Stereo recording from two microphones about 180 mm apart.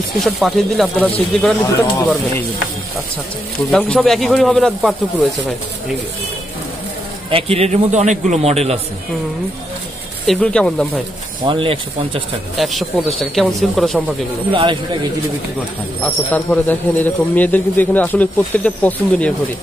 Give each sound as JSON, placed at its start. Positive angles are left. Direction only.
{"t": 0.2, "sound": "speech", "side_deg": 0}
{"t": 1.8, "sound": "speech", "side_deg": 15}
{"t": 3.7, "sound": "speech", "side_deg": 5}
{"t": 7.2, "sound": "a man's voice", "side_deg": -30}
{"t": 10.2, "sound": "speech", "side_deg": 5}
{"t": 11.4, "sound": "speech", "side_deg": -30}
{"t": 12.5, "sound": "speech", "side_deg": 0}
{"t": 14.5, "sound": "speech", "side_deg": -25}
{"t": 16.0, "sound": "speech", "side_deg": 10}